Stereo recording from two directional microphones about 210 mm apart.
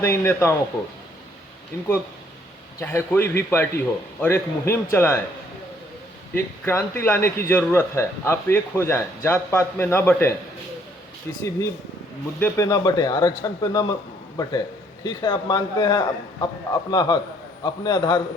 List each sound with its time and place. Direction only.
0.0 s a man's voice: 10° left (ahead or behind)
2.8 s a man's voice: 10° left (ahead or behind)
6.3 s a man's voice: 10° left (ahead or behind)
15.0 s a man's voice: 20° left (ahead or behind)